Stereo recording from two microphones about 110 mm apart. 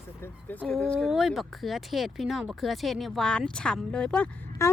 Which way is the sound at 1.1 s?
Centre (ahead or behind).